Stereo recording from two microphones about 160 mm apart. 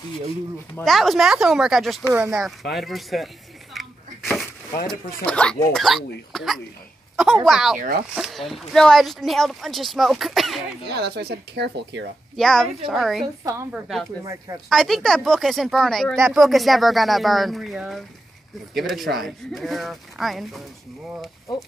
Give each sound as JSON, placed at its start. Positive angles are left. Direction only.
{"t": 0.8, "sound": "speech", "side_deg": 0}
{"t": 2.0, "sound": "speech", "side_deg": -15}
{"t": 2.4, "sound": "speech", "side_deg": 0}
{"t": 3.7, "sound": "a sound", "side_deg": 0}
{"t": 5.2, "sound": "speech", "side_deg": 5}
{"t": 10.9, "sound": "speech", "side_deg": -90}
{"t": 12.4, "sound": "speech", "side_deg": 5}
{"t": 13.4, "sound": "speech", "side_deg": -20}
{"t": 13.7, "sound": "speech", "side_deg": 0}
{"t": 14.2, "sound": "speech", "side_deg": -20}
{"t": 14.7, "sound": "speech", "side_deg": 0}